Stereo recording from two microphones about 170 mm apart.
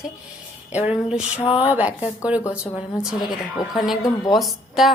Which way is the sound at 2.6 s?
15° left (ahead or behind).